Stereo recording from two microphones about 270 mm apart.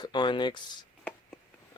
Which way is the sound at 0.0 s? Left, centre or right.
Centre.